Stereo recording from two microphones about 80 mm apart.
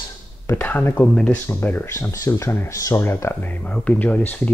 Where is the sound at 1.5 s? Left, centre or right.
Left.